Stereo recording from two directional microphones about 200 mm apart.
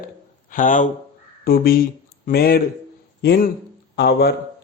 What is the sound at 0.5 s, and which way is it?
A man's voice, 40° left (ahead or behind).